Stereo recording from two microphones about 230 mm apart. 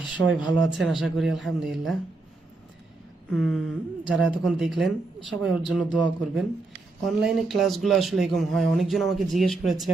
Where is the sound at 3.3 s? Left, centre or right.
Centre.